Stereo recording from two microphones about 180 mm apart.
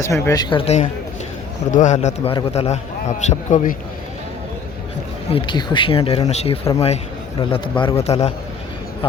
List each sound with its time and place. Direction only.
0.0 s speech: 15° left (ahead or behind)
0.5 s a man's voice: 35° left (ahead or behind)
5.3 s a man's voice: 25° left (ahead or behind)